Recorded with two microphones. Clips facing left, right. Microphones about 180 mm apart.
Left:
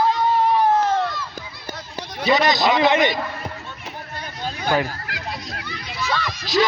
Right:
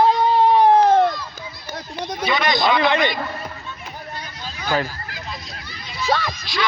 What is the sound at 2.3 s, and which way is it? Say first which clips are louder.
Speech: left 4 dB; 35° left (ahead or behind).